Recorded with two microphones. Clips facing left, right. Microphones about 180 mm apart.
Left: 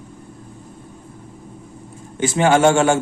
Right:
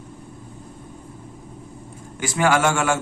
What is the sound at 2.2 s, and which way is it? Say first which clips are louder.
Speech: left 5 dB; 25° left (ahead or behind).